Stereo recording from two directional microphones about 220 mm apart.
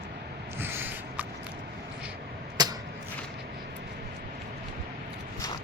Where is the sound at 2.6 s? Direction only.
20° right (ahead or behind).